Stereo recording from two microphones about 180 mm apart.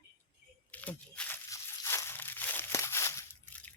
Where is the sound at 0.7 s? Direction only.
10° left (ahead or behind).